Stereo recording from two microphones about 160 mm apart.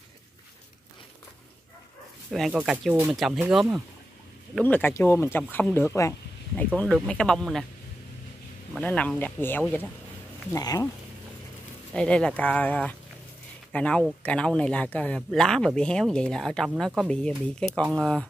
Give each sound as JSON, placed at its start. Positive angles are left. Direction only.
{"t": 2.5, "sound": "a man's voice", "side_deg": -5}
{"t": 4.6, "sound": "a man's voice", "side_deg": 10}
{"t": 8.7, "sound": "speech", "side_deg": 10}
{"t": 10.5, "sound": "speech", "side_deg": 20}
{"t": 11.9, "sound": "a man's voice", "side_deg": 5}